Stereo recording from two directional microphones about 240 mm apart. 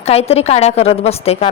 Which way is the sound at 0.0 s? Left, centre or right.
Left.